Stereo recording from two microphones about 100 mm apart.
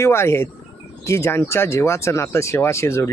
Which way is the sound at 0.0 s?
25° left (ahead or behind).